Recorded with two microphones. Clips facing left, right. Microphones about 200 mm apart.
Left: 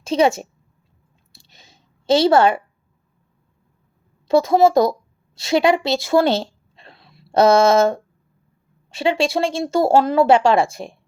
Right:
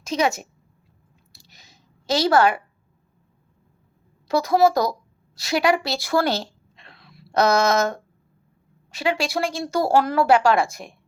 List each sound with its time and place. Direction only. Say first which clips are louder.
0.0 s speech: left 6 dB; 30° left (ahead or behind)
1.3 s a sound: left 3 dB; 25° left (ahead or behind)
4.3 s speech: left 4 dB; 25° left (ahead or behind)